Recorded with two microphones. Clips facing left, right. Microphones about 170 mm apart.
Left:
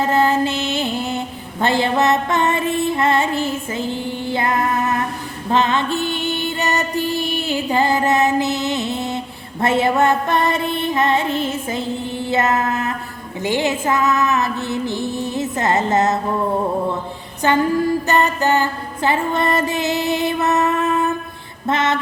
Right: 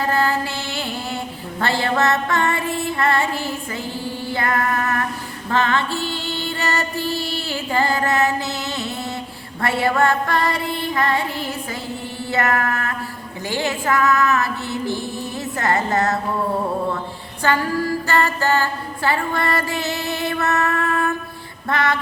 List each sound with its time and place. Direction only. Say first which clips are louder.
0.0 s mantra: left 4 dB; 20° left (ahead or behind)
5.5 s music: left 3 dB; 20° left (ahead or behind)
13.4 s female singing: left 4 dB; 20° left (ahead or behind)
17.4 s female singing: left 4 dB; 20° left (ahead or behind)